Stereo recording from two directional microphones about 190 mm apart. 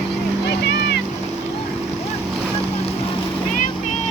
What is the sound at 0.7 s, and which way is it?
Boat, 65° left (ahead or behind).